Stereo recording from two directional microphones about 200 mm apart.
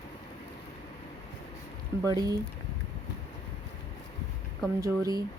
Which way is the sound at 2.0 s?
20° right (ahead or behind).